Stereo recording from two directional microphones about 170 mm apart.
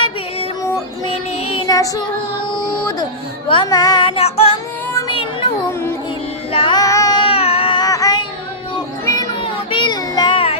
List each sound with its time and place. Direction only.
1.5 s child singing: 25° left (ahead or behind)
3.5 s child singing: 25° left (ahead or behind)
4.9 s a sound: 30° left (ahead or behind)
6.5 s child singing: 30° left (ahead or behind)